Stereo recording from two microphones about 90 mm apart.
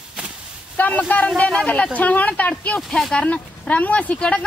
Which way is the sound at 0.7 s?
20° left (ahead or behind).